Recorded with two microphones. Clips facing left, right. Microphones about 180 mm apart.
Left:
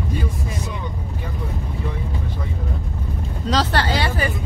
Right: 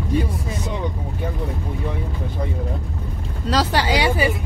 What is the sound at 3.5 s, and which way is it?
Speech, 10° right (ahead or behind).